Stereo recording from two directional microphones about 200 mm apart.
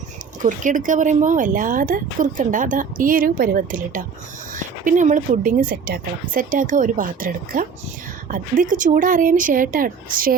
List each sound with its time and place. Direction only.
0.4 s a woman's voice: 40° right (ahead or behind)